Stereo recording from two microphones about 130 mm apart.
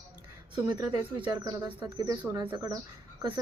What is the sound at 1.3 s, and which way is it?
Speech, 30° right (ahead or behind).